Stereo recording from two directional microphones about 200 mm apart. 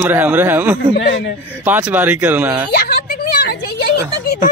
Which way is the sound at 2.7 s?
50° left (ahead or behind).